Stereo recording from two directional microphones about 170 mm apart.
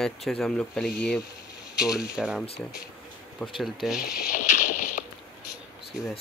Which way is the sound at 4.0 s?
55° left (ahead or behind).